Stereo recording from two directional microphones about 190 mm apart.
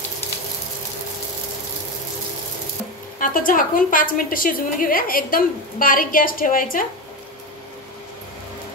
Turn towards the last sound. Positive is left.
turn(degrees=45)  # may be behind; listen again after turning